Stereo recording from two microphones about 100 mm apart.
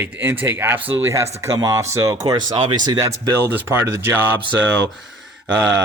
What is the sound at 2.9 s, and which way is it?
Speech, 35° right (ahead or behind).